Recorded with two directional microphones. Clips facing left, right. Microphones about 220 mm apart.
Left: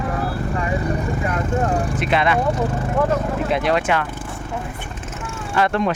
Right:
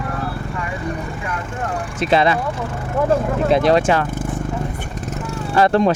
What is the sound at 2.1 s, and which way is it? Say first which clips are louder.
Speech: right 5 dB; 35° right (ahead or behind).